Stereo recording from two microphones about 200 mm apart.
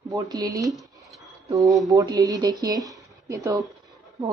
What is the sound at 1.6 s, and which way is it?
Speech, centre (ahead or behind).